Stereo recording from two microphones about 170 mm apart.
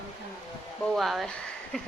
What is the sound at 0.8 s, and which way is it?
A woman's voice, centre (ahead or behind).